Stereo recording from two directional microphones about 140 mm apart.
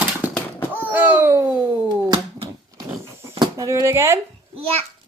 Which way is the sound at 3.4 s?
25° right (ahead or behind).